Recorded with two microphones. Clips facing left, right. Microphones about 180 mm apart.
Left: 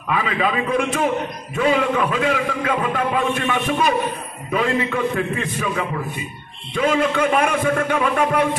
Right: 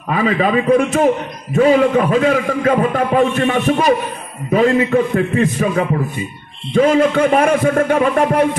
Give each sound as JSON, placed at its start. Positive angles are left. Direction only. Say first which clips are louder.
{"t": 0.1, "sound": "a man's voice", "louder": "right 6 dB", "side_deg": -40}